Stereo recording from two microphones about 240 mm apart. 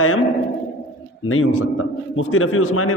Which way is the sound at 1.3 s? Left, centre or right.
Left.